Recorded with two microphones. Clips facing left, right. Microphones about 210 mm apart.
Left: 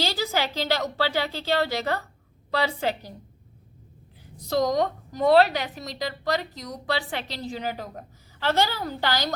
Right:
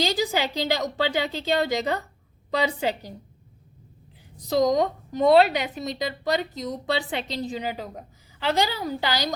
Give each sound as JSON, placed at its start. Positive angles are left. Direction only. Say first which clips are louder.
{"t": 0.0, "sound": "a woman's voice", "louder": "right 2 dB", "side_deg": -15}
{"t": 4.4, "sound": "a woman's voice", "louder": "right 2 dB", "side_deg": -15}